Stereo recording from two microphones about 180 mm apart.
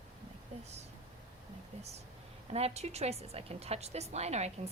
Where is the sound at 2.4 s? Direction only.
35° right (ahead or behind).